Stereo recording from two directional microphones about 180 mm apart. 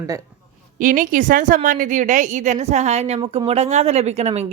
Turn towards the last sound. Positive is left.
turn(degrees=-35)  # may be behind; listen again after turning